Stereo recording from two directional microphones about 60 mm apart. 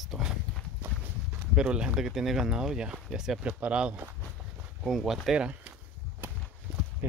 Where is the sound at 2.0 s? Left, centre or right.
Centre; by 4.0 s right.